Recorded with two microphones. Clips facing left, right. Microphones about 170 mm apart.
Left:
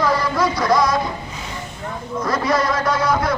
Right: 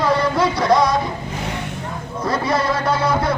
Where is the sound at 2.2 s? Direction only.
30° right (ahead or behind).